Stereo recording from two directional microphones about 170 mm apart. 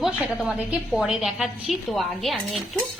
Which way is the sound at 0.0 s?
Centre (ahead or behind).